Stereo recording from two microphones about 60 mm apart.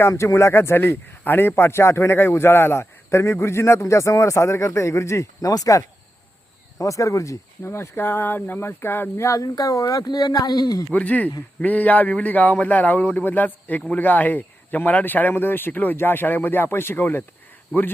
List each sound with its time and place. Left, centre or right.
0.1 s a man's voice: left
9.2 s speech: left
10.9 s a man's voice: left